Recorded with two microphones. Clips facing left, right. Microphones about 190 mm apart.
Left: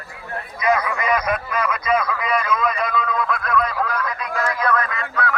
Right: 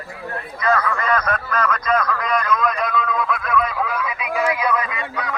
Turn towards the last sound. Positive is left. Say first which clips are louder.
# left 2 dB
turn(degrees=-15)  # may be behind; listen again after turning